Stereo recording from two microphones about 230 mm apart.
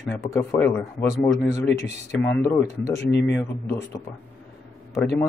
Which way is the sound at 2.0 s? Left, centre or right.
Centre.